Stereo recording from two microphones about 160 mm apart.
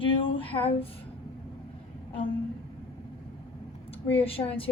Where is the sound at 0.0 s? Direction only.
35° left (ahead or behind).